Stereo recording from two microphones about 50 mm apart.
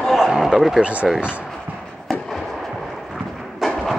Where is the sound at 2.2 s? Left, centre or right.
Centre.